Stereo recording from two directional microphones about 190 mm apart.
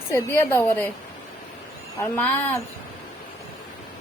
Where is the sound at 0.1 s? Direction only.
15° left (ahead or behind).